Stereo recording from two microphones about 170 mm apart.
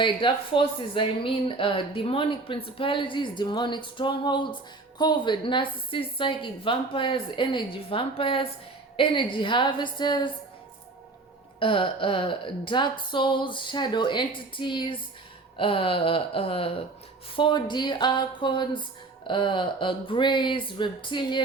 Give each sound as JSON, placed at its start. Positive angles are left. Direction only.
{"t": 0.0, "sound": "speech", "side_deg": 30}
{"t": 11.6, "sound": "speech", "side_deg": 30}